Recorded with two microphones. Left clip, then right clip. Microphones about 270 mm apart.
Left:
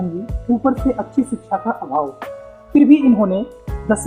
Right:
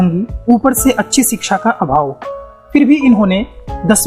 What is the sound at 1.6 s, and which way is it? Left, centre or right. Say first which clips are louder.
Speech: right 9 dB; right.